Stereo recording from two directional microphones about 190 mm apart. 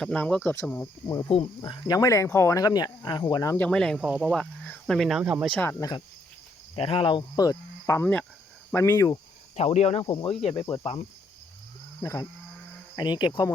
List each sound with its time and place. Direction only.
0.0 s speech: 5° left (ahead or behind)
3.7 s speech: 5° left (ahead or behind)
5.5 s speech: 10° left (ahead or behind)
6.7 s speech: 30° left (ahead or behind)
9.6 s speech: 35° left (ahead or behind)
12.0 s speech: 15° left (ahead or behind)